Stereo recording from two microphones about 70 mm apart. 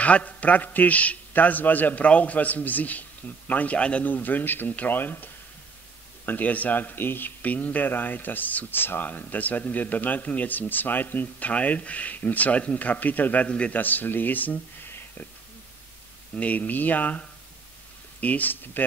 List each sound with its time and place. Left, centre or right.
0.0 s speech: centre
16.3 s speech: left